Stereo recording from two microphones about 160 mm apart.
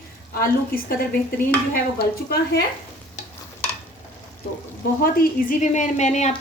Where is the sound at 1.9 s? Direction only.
80° left.